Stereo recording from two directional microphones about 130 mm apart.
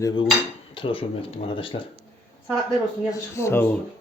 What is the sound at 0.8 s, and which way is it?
Speech, 45° left (ahead or behind).